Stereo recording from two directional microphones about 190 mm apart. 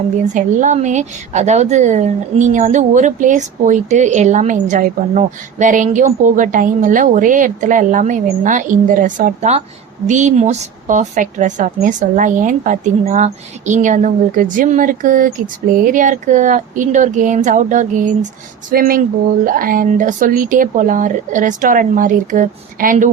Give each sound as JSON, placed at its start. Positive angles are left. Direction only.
{"t": 0.3, "sound": "a woman's voice", "side_deg": -40}